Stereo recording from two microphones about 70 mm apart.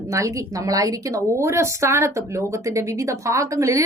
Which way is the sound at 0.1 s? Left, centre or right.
Right.